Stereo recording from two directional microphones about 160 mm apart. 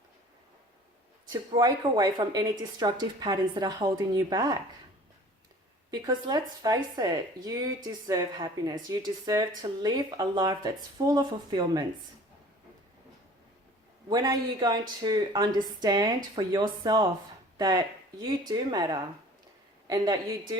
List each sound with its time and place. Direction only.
1.3 s speech: 25° right (ahead or behind)
5.9 s speech: 25° right (ahead or behind)
14.1 s speech: 25° right (ahead or behind)